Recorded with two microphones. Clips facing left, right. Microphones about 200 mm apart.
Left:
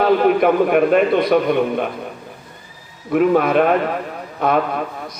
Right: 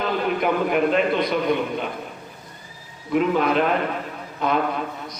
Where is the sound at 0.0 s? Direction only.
55° left (ahead or behind).